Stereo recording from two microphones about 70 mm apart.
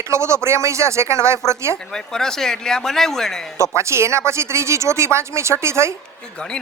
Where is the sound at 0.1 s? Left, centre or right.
Right.